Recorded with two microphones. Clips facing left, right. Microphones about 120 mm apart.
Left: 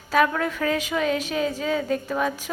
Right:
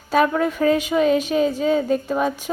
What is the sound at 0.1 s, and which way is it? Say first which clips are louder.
A woman's voice: right 3 dB; 30° right (ahead or behind).